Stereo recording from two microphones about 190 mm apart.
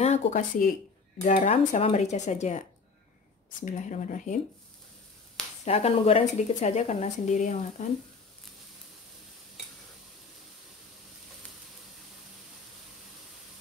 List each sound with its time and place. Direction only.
0.0 s speech: 40° left (ahead or behind)
3.6 s speech: 40° left (ahead or behind)
5.7 s speech: 30° left (ahead or behind)